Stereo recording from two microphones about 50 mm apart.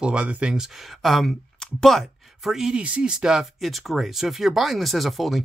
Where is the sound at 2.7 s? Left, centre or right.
Right.